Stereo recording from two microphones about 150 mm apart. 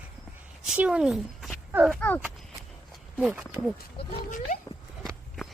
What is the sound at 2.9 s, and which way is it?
Walk, 5° right (ahead or behind).